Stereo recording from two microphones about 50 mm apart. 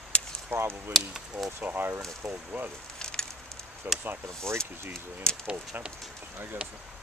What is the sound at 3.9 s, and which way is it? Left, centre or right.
Speech, right.